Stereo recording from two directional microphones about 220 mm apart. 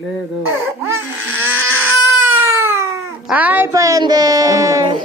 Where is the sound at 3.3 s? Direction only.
5° right (ahead or behind).